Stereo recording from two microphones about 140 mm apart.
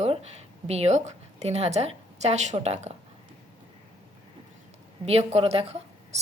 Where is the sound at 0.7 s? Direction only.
50° right (ahead or behind).